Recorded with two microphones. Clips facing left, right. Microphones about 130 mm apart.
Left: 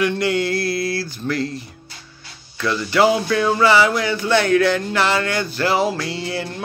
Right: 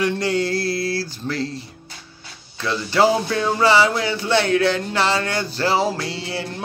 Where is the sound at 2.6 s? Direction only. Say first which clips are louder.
Left 1 dB; 30° right (ahead or behind).